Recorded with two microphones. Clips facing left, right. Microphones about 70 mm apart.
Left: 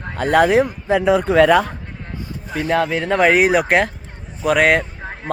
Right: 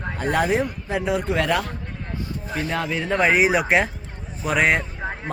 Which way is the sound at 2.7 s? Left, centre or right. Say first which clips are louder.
Left 7 dB; left.